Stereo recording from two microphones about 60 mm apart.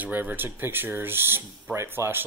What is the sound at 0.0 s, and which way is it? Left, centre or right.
Speech, right.